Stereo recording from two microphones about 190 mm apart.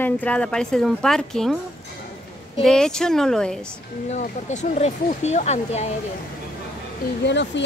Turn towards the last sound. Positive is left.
turn(degrees=65)  # may be behind; listen again after turning